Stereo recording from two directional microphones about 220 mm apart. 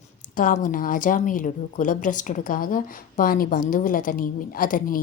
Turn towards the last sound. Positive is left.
turn(degrees=40)  # may be behind; listen again after turning